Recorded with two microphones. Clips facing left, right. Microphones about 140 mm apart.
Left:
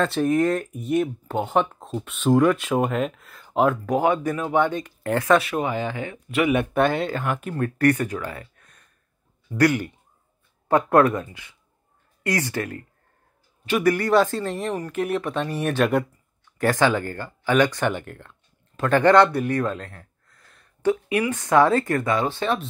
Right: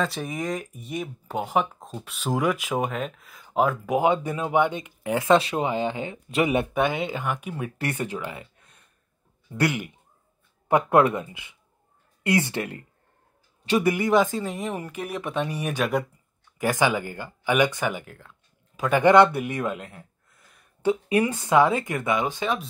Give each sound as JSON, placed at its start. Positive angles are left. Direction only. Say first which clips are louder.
{"t": 0.0, "sound": "speech", "louder": "left 8 dB", "side_deg": 0}
{"t": 3.8, "sound": "speech", "louder": "left 1 dB", "side_deg": -15}
{"t": 5.3, "sound": "speech", "louder": "even", "side_deg": -25}
{"t": 6.7, "sound": "speech", "louder": "left 3 dB", "side_deg": -15}
{"t": 7.8, "sound": "speech", "louder": "left 9 dB", "side_deg": -20}
{"t": 13.8, "sound": "speech", "louder": "left 4 dB", "side_deg": -15}
{"t": 21.1, "sound": "speech", "louder": "right 1 dB", "side_deg": -30}
{"t": 21.5, "sound": "speech", "louder": "left 4 dB", "side_deg": -15}